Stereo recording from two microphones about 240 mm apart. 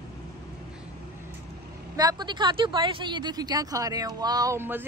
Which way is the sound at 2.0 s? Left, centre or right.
Centre.